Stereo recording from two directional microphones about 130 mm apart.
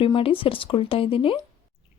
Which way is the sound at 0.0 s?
45° left (ahead or behind).